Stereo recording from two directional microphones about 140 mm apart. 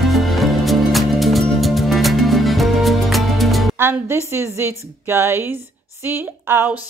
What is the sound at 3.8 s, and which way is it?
A woman's voice, 15° right (ahead or behind).